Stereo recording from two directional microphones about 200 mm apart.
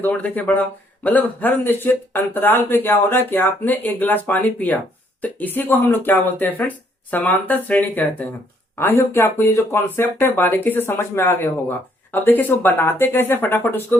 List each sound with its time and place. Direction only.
0.0 s speech: 10° left (ahead or behind)